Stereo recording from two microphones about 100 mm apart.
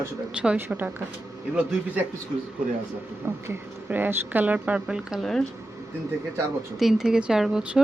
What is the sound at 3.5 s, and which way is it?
Speech, 20° right (ahead or behind).